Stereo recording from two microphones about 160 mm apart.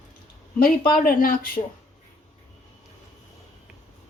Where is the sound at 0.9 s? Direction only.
60° left (ahead or behind).